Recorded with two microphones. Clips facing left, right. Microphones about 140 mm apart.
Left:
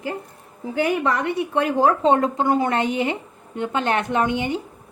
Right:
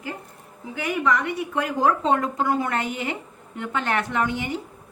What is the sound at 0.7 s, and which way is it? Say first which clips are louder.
A woman's voice: left 3 dB; 35° left (ahead or behind).